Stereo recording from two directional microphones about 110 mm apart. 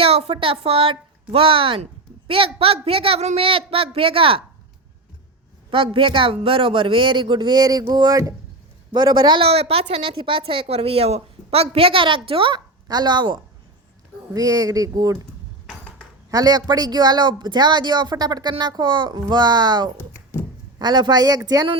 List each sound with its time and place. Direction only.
0.0 s a woman's voice: 60° right (ahead or behind)
5.7 s speech: 50° right (ahead or behind); by 8.4 s 30° right (ahead or behind)
8.9 s speech: 45° right (ahead or behind)
9.5 s a woman's voice: 60° right (ahead or behind); by 13.4 s 45° right (ahead or behind)
14.3 s speech: 35° right (ahead or behind)
16.3 s speech: 35° right (ahead or behind)
20.0 s a sound: 20° left (ahead or behind)
20.7 s speech: 40° right (ahead or behind)